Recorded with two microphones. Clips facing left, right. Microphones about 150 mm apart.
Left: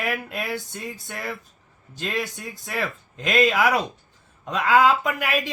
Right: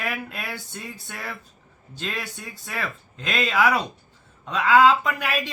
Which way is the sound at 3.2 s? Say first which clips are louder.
Left 2 dB; 10° left (ahead or behind).